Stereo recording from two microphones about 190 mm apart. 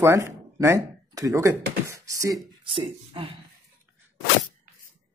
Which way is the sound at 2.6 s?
30° right (ahead or behind).